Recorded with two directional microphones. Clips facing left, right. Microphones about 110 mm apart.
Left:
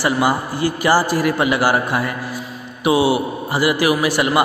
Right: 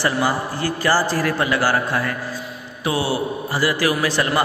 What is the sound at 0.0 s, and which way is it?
A man's voice, 15° left (ahead or behind).